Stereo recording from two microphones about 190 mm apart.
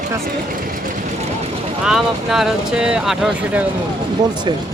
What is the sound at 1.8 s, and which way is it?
Speech, centre (ahead or behind).